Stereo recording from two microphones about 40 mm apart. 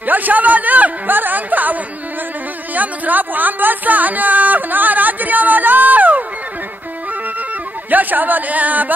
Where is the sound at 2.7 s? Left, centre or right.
Right.